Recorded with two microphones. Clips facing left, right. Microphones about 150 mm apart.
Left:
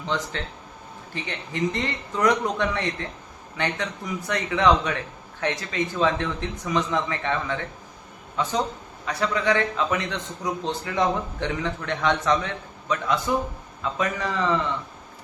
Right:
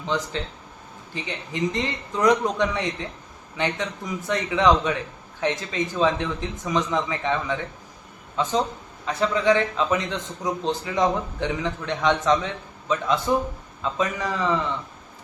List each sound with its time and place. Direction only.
0.0 s a man's voice: 15° right (ahead or behind)
14.0 s a man's voice: 10° right (ahead or behind)